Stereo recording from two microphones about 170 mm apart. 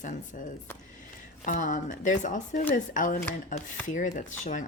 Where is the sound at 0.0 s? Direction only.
50° left (ahead or behind).